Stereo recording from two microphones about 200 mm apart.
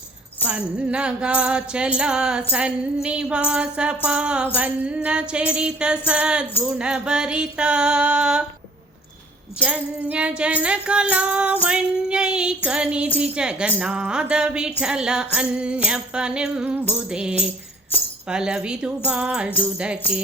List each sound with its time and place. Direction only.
0.4 s speech: 5° right (ahead or behind)
9.6 s speech: 5° right (ahead or behind)
17.9 s speech: 10° left (ahead or behind)
18.3 s speech: 5° right (ahead or behind)